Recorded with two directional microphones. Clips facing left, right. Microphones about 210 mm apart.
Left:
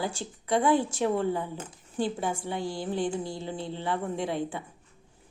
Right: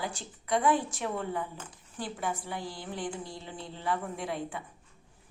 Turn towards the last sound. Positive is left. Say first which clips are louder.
# left 3 dB
turn(degrees=30)  # may be behind; listen again after turning